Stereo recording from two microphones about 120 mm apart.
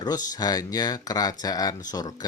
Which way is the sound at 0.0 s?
35° left (ahead or behind).